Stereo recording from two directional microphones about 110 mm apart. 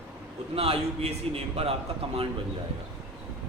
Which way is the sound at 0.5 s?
60° right (ahead or behind).